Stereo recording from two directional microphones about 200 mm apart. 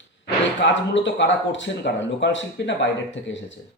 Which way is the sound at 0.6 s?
60° left (ahead or behind).